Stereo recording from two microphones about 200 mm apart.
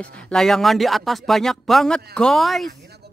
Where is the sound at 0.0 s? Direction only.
5° left (ahead or behind).